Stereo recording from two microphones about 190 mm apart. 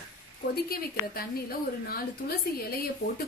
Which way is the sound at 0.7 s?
55° left (ahead or behind).